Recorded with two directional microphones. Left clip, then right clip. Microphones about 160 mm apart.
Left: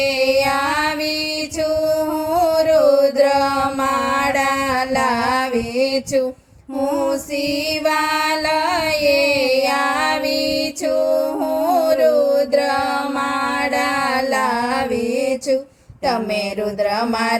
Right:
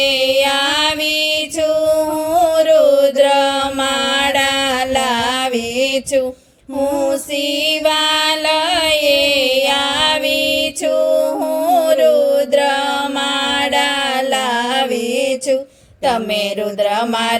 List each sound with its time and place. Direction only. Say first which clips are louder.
2.3 s music: right 3 dB; 30° right (ahead or behind)
4.2 s mantra: right 3 dB; 50° right (ahead or behind)
8.4 s music: right 3 dB; 50° right (ahead or behind)
10.8 s music: right 3 dB; 30° right (ahead or behind)
11.6 s a sound: right 3 dB; 30° right (ahead or behind)